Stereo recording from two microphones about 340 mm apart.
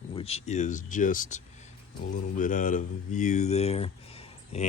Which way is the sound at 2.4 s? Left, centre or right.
Left.